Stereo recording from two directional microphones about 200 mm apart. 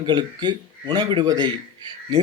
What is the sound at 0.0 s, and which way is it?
A man's voice, 20° right (ahead or behind).